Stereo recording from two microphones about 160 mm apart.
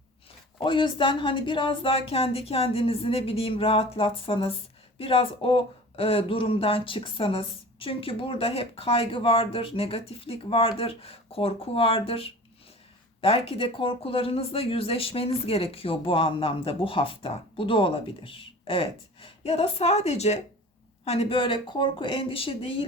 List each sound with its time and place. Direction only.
0.6 s speech: 30° left (ahead or behind)